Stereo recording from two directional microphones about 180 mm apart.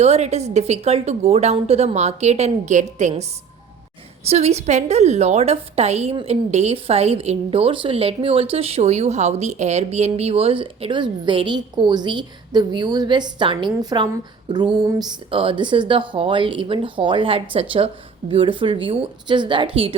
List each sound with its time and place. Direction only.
0.0 s a woman's voice: 35° right (ahead or behind)
4.3 s a woman's voice: 35° right (ahead or behind)